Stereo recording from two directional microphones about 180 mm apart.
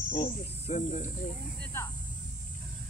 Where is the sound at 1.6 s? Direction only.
15° left (ahead or behind).